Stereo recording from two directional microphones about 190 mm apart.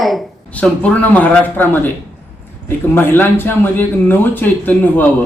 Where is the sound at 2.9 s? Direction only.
10° left (ahead or behind).